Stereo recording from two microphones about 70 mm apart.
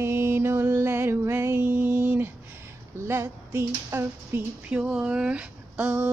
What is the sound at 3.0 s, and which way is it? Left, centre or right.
Child singing, right.